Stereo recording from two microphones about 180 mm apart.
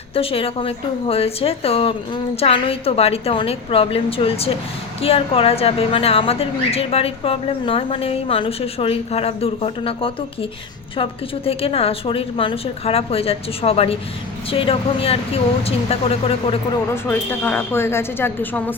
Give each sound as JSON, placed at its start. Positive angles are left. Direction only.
{"t": 0.1, "sound": "speech", "side_deg": 30}
{"t": 16.9, "sound": "speech", "side_deg": 10}